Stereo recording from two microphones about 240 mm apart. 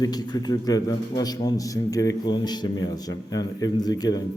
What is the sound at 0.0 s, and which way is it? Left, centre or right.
A man's voice, centre.